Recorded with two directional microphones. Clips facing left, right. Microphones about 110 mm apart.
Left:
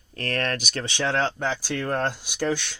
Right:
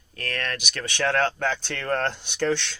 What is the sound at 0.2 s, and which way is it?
Speech, 40° left (ahead or behind).